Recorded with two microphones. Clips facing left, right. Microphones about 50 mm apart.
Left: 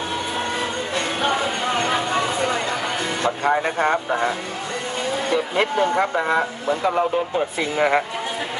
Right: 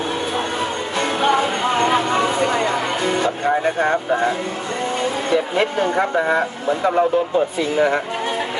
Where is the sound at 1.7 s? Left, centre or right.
Right.